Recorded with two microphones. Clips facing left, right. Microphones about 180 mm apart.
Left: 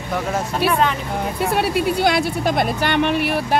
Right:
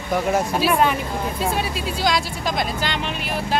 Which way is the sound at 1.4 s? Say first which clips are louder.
Left 8 dB; 65° left (ahead or behind).